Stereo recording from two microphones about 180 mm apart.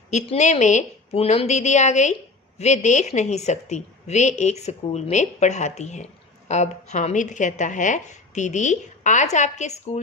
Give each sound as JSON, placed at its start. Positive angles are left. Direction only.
{"t": 0.1, "sound": "speech", "side_deg": 40}